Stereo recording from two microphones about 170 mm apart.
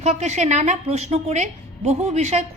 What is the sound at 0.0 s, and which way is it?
A woman's voice, 45° right (ahead or behind).